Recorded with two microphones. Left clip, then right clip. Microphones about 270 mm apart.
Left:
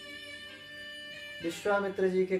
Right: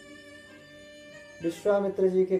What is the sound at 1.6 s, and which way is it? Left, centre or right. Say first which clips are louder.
Speech: right 4 dB; left.